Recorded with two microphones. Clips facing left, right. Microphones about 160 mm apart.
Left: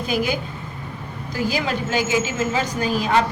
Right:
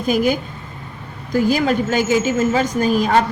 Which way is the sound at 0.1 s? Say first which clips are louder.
Right 6 dB; 45° right (ahead or behind).